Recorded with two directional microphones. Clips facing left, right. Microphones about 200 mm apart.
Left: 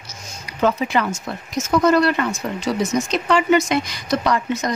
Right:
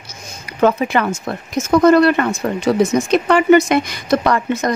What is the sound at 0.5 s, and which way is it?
Speech, 55° right (ahead or behind).